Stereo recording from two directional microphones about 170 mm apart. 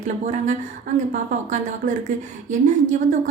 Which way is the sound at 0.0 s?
45° right (ahead or behind).